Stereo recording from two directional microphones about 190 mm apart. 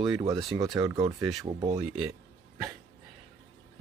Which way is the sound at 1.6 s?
25° right (ahead or behind).